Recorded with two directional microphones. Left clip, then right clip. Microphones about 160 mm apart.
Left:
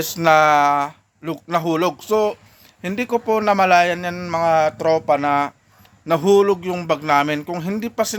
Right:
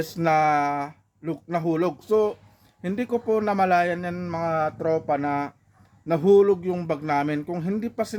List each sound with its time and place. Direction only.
0.0 s a man's voice: 5° right (ahead or behind)
4.8 s speech: 20° left (ahead or behind)
5.2 s speech: centre (ahead or behind)